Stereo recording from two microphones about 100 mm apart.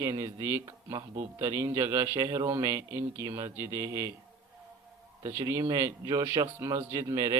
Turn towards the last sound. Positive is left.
turn(degrees=-35)  # may be behind; listen again after turning